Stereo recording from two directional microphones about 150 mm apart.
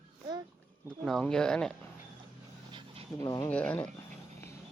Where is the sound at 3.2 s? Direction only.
25° left (ahead or behind).